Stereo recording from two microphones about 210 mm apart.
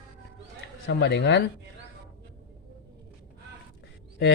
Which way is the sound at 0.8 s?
55° left (ahead or behind).